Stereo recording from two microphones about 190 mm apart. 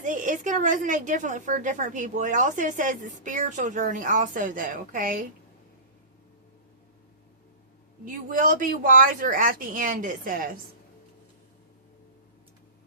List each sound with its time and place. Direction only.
0.0 s a woman's voice: 45° right (ahead or behind)
8.0 s a woman's voice: 45° right (ahead or behind)